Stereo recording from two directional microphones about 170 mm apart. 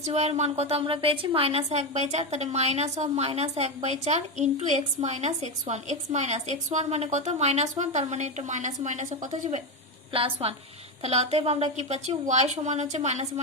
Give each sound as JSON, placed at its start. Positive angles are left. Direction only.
{"t": 0.0, "sound": "a woman's voice", "side_deg": -40}
{"t": 10.1, "sound": "a woman's voice", "side_deg": -35}